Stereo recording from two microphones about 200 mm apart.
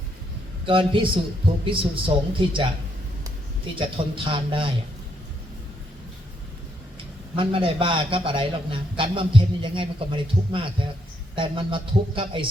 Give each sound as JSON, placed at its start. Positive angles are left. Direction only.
{"t": 0.6, "sound": "a man's voice", "side_deg": -25}
{"t": 3.8, "sound": "a man's voice", "side_deg": -25}
{"t": 7.3, "sound": "a man's voice", "side_deg": -25}